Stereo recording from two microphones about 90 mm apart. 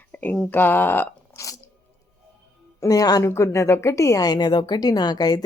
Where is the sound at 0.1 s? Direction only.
15° left (ahead or behind).